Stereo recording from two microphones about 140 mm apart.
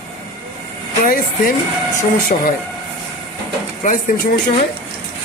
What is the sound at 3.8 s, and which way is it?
Speech, 70° left (ahead or behind).